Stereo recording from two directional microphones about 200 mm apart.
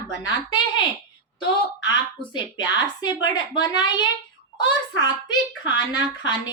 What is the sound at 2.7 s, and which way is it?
A child's voice, 20° left (ahead or behind).